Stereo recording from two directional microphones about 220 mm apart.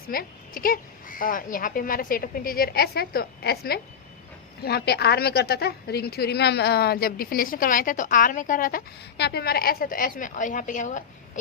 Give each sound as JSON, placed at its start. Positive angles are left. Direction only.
{"t": 0.1, "sound": "a woman's voice", "side_deg": 40}